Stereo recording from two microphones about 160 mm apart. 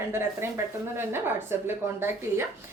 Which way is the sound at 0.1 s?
15° right (ahead or behind).